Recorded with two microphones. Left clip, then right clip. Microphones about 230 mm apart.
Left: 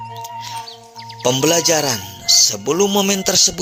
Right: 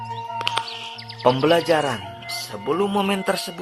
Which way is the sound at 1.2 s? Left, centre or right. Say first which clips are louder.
Left 2 dB; left.